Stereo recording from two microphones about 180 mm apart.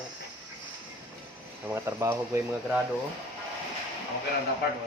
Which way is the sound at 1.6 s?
15° right (ahead or behind).